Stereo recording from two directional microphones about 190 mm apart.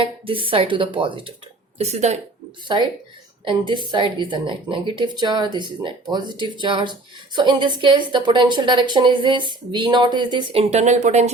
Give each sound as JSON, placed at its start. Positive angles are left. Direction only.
{"t": 0.0, "sound": "a woman's voice", "side_deg": -30}
{"t": 3.9, "sound": "a woman's voice", "side_deg": -25}